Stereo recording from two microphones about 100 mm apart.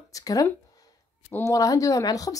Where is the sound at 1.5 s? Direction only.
35° left (ahead or behind).